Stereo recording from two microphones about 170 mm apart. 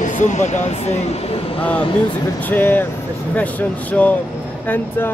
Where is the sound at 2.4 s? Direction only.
10° left (ahead or behind).